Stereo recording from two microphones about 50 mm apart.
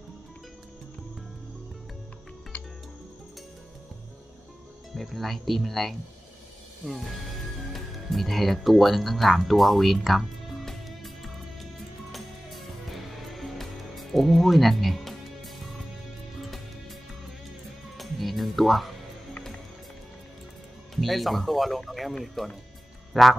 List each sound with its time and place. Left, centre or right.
2.5 s music: left
4.9 s speech: centre
11.8 s music: centre
17.8 s music: centre
20.9 s speech: centre